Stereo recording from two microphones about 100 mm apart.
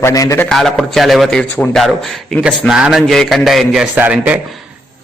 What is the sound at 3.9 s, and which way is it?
Speech, 15° right (ahead or behind).